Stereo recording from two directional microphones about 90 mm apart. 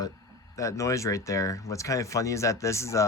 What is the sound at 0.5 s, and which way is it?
Speech, 35° left (ahead or behind).